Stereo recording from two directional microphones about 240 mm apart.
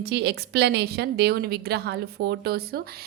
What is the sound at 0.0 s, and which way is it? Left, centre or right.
A woman's voice, right.